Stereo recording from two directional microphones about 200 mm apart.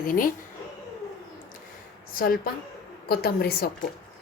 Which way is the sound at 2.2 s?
45° left (ahead or behind).